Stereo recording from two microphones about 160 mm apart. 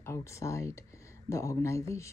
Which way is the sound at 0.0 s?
15° left (ahead or behind).